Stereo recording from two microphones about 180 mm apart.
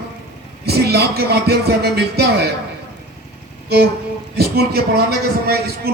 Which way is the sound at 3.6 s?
65° right (ahead or behind).